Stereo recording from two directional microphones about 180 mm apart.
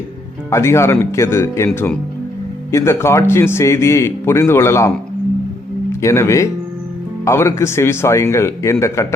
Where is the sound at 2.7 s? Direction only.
15° left (ahead or behind).